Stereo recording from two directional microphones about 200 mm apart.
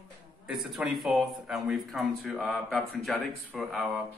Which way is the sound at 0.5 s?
Centre (ahead or behind).